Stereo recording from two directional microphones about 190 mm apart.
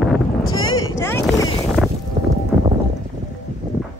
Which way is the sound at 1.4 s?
20° left (ahead or behind).